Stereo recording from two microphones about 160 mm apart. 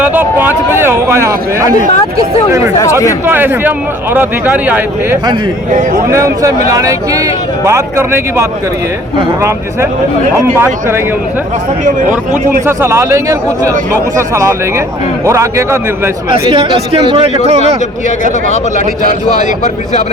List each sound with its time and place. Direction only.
0.0 s speech: 10° right (ahead or behind)
3.2 s a man's voice: 15° right (ahead or behind)
10.3 s speech: 15° right (ahead or behind)
12.6 s a man's voice: 15° right (ahead or behind)
16.3 s a man's voice: 30° right (ahead or behind)
19.4 s speech: 50° left (ahead or behind)